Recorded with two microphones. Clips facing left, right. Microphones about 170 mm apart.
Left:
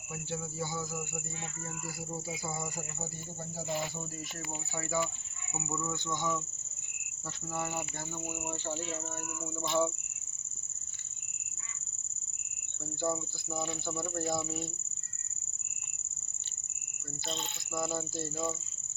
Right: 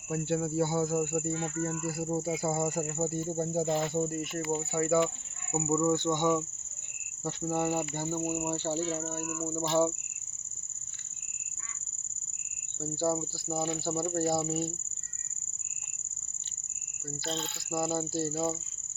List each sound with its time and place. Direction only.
0.1 s cricket: 60° right (ahead or behind)
7.8 s cricket: 40° right (ahead or behind)
12.8 s cricket: 35° right (ahead or behind)
17.2 s speech: 15° left (ahead or behind)
17.7 s cricket: 35° right (ahead or behind)